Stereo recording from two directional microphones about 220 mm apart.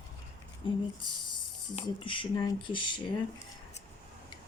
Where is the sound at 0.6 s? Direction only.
20° left (ahead or behind).